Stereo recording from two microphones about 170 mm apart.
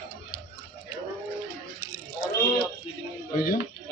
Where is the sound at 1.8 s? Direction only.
15° right (ahead or behind).